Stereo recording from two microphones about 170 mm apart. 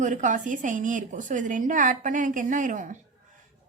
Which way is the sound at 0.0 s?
45° right (ahead or behind).